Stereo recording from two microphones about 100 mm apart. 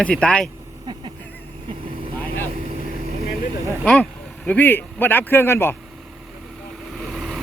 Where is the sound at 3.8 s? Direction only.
15° left (ahead or behind).